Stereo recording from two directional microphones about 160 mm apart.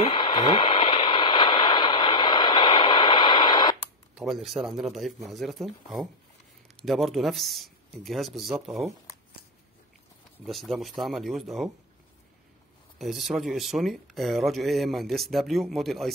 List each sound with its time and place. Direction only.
0.0 s radio: 30° left (ahead or behind)
4.1 s speech: 5° right (ahead or behind)
10.4 s speech: centre (ahead or behind)
13.0 s speech: centre (ahead or behind)